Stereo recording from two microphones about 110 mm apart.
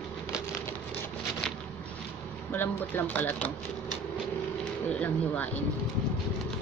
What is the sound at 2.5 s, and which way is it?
Speech, 15° left (ahead or behind).